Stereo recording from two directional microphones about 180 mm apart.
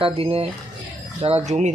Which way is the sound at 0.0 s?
30° right (ahead or behind).